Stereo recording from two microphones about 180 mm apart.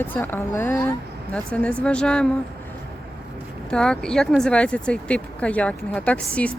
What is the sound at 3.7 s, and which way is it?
Speech, 5° left (ahead or behind).